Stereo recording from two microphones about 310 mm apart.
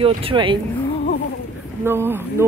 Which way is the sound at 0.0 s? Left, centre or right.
Centre.